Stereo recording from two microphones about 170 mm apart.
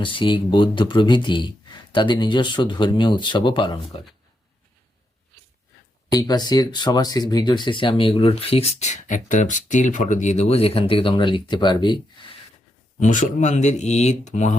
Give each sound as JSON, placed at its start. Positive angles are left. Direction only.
{"t": 0.0, "sound": "speech", "side_deg": 30}
{"t": 6.1, "sound": "speech", "side_deg": 20}
{"t": 13.0, "sound": "speech", "side_deg": 50}